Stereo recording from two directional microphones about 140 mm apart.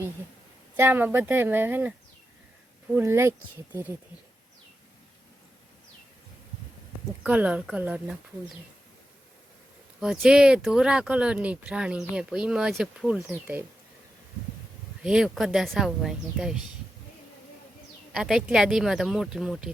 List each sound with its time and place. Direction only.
0.8 s speech: 15° right (ahead or behind)
7.2 s speech: 10° right (ahead or behind)
10.0 s speech: 5° right (ahead or behind)
15.0 s speech: 5° right (ahead or behind)
18.1 s speech: 5° right (ahead or behind)